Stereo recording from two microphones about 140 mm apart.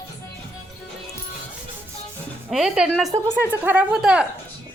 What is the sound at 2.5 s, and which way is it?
Speech, centre (ahead or behind).